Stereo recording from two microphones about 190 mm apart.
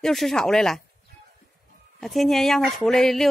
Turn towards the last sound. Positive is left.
turn(degrees=0)  # may be behind; listen again after turning